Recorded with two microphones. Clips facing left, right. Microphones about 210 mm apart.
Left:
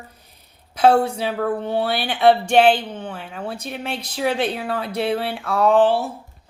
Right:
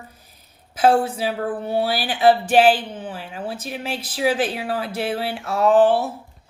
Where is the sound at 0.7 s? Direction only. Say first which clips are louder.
Left 1 dB; 5° right (ahead or behind).